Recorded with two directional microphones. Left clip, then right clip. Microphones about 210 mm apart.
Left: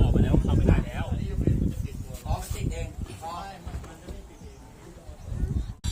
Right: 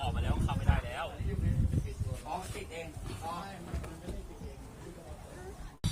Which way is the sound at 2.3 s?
50° left (ahead or behind).